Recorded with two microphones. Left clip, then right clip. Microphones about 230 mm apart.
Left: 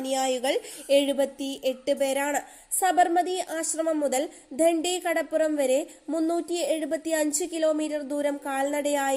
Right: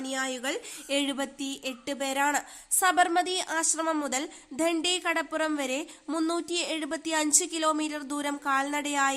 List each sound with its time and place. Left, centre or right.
0.0 s a woman's voice: right
2.0 s a woman's voice: centre